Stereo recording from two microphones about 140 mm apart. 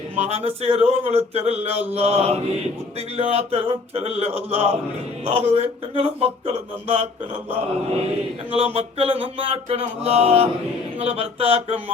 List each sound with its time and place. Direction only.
0.2 s speech: 45° right (ahead or behind)
8.5 s speech: 45° right (ahead or behind)